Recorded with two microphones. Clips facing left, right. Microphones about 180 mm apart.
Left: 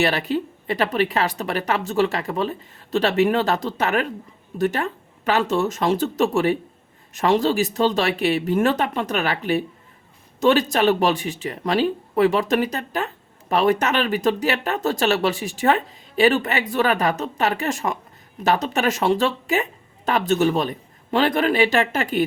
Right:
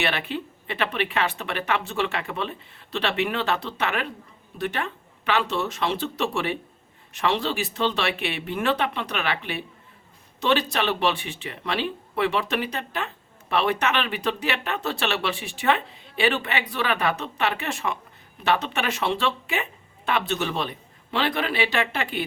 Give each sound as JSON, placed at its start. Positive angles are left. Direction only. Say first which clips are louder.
{"t": 0.0, "sound": "a man's voice", "louder": "left 6 dB", "side_deg": 40}